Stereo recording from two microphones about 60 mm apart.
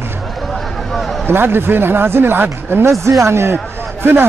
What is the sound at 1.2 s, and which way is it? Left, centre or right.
Speech, right.